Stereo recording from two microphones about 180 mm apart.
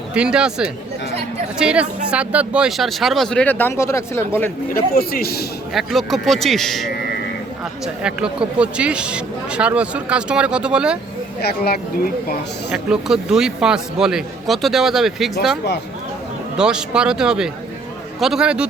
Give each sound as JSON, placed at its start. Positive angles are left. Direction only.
{"t": 0.1, "sound": "speech", "side_deg": -5}
{"t": 4.7, "sound": "speech", "side_deg": 55}
{"t": 5.7, "sound": "speech", "side_deg": 0}
{"t": 11.4, "sound": "speech", "side_deg": 60}
{"t": 12.7, "sound": "speech", "side_deg": -5}
{"t": 16.6, "sound": "speech", "side_deg": -5}